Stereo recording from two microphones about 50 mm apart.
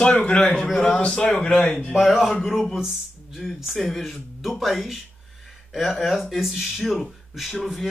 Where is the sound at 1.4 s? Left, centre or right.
Left.